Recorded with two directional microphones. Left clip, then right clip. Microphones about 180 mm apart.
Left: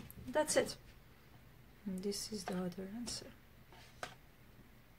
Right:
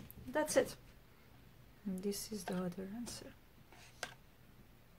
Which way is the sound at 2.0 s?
25° right (ahead or behind).